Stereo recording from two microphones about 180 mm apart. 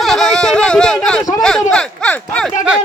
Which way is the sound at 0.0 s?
Centre (ahead or behind).